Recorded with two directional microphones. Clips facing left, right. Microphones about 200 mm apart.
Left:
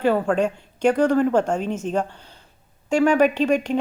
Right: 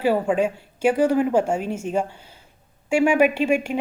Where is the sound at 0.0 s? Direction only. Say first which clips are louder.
Even; 10° right (ahead or behind).